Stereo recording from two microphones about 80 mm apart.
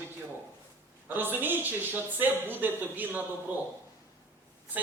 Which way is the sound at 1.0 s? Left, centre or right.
Right.